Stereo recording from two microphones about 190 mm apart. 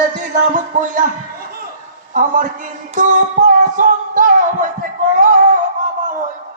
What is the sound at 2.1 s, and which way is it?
Speech, 45° right (ahead or behind).